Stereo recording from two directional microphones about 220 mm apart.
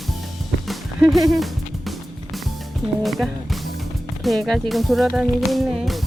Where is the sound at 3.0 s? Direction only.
Centre (ahead or behind).